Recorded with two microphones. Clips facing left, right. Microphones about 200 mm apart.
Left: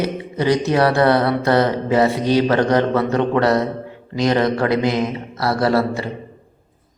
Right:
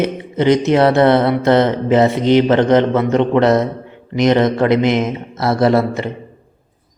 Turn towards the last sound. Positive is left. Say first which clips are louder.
# right 4 dB
turn(degrees=-20)  # may be behind; listen again after turning